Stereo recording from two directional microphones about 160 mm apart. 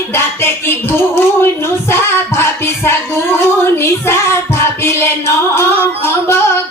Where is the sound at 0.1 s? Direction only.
15° left (ahead or behind).